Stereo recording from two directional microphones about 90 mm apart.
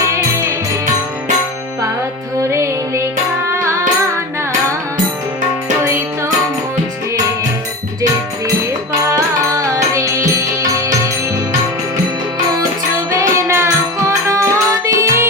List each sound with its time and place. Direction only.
0.1 s music: 35° right (ahead or behind)
2.4 s music: 35° right (ahead or behind)
9.6 s music: 40° right (ahead or behind)
13.1 s music: 30° right (ahead or behind)